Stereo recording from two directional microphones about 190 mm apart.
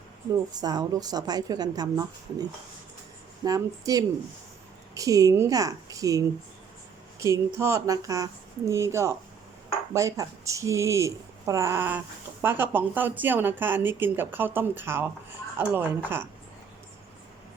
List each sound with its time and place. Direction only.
0.6 s a woman's voice: 20° right (ahead or behind)
3.4 s a woman's voice: 20° right (ahead or behind)